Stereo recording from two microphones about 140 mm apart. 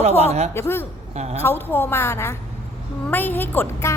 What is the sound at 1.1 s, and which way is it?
Speech, 50° right (ahead or behind).